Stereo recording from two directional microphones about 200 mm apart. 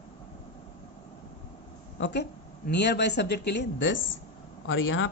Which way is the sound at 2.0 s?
60° left (ahead or behind).